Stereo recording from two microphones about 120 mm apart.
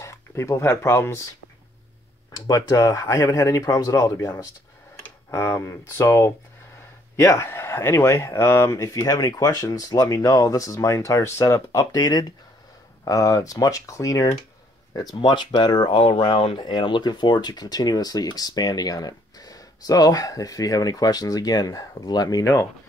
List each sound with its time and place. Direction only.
0.0 s speech: 25° left (ahead or behind)
2.3 s speech: 35° left (ahead or behind)